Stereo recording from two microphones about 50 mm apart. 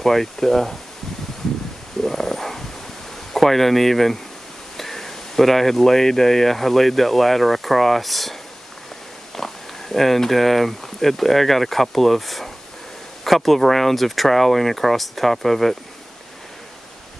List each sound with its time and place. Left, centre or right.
0.0 s speech: centre
2.0 s dog: centre
3.3 s speech: centre
9.4 s speech: centre